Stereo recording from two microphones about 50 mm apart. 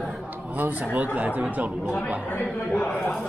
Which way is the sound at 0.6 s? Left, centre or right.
Right.